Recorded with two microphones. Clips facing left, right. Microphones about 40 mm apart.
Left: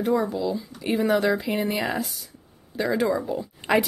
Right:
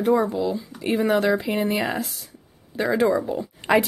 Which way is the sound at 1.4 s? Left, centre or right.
Centre.